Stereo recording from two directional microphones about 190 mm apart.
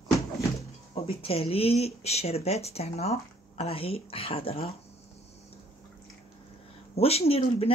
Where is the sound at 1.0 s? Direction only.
30° left (ahead or behind).